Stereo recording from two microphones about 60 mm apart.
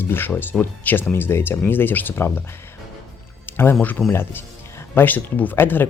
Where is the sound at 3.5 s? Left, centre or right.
Left.